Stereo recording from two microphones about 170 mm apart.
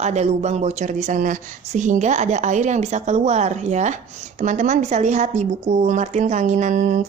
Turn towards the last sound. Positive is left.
turn(degrees=-45)  # may be behind; listen again after turning